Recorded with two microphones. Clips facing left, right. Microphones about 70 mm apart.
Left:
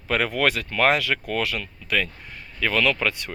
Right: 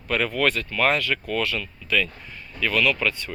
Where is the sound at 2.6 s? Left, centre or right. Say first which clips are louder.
Even; left.